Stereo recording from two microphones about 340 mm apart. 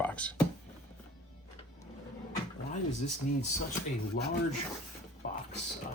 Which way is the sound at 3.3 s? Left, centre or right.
Left.